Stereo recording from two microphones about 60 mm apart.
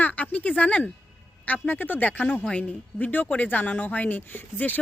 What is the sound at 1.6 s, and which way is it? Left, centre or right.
Speech, left.